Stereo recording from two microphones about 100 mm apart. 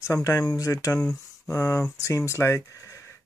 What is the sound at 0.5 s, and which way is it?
Speech, 35° left (ahead or behind).